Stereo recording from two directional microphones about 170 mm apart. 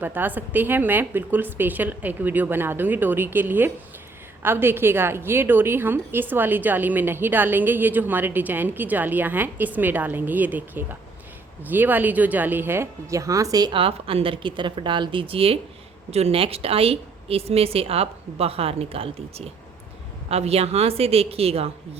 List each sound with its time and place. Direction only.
0.0 s a woman's voice: 10° right (ahead or behind); by 21.7 s 35° right (ahead or behind)